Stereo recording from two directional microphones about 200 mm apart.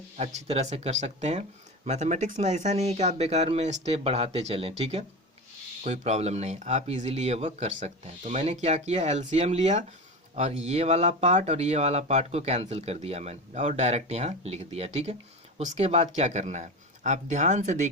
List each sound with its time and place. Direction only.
0.3 s speech: 35° right (ahead or behind)